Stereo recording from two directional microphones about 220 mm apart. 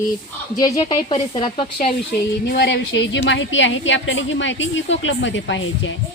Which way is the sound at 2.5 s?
45° left (ahead or behind).